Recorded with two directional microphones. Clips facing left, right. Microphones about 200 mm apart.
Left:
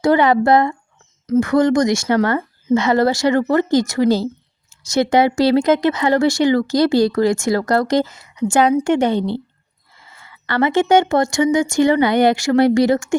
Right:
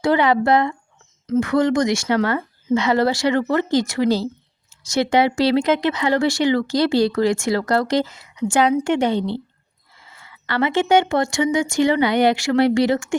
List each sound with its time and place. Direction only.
0.0 s speech: 45° left (ahead or behind)
10.4 s speech: 50° left (ahead or behind)